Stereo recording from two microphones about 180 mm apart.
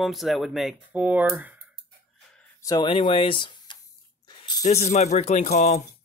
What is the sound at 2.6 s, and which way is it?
Speech, 20° left (ahead or behind).